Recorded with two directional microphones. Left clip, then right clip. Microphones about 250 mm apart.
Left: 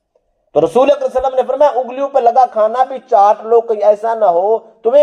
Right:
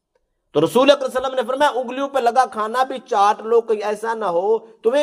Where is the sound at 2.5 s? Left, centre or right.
Right.